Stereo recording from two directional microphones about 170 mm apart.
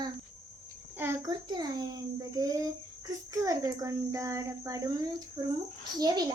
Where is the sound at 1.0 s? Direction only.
15° right (ahead or behind).